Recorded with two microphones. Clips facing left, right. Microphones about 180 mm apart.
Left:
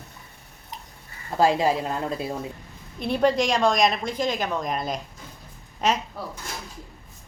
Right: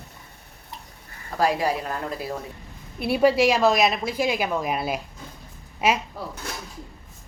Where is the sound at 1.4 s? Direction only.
25° left (ahead or behind).